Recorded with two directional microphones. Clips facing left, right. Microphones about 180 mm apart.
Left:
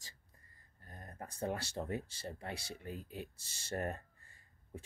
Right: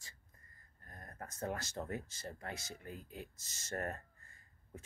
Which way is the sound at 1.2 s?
30° left (ahead or behind).